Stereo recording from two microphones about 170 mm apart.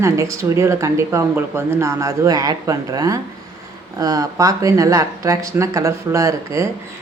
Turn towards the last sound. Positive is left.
turn(degrees=-20)  # may be behind; listen again after turning